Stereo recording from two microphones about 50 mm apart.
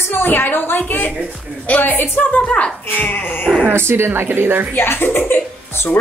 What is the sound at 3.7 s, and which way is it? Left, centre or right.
A woman's voice, right.